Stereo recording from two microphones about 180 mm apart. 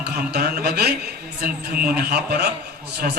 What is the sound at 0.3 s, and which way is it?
Speech, 55° right (ahead or behind).